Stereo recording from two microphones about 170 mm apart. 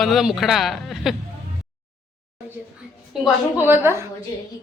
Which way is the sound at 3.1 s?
10° right (ahead or behind).